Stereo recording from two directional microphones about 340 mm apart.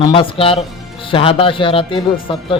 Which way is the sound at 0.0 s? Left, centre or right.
Centre.